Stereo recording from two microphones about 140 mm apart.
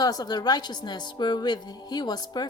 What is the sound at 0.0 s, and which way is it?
A woman's voice, 30° left (ahead or behind).